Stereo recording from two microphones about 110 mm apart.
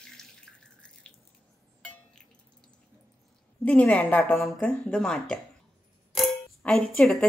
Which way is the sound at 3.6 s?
15° left (ahead or behind).